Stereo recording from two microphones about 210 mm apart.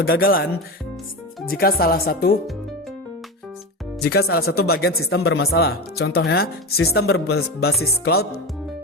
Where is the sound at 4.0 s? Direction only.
50° left (ahead or behind).